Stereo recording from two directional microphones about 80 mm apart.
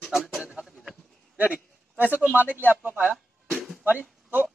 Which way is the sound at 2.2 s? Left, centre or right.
Right.